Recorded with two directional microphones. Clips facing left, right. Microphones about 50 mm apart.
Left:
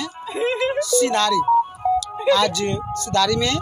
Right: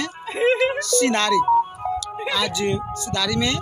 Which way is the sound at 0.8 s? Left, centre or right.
Right.